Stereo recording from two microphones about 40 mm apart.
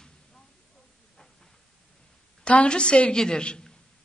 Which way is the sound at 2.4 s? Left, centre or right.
Left.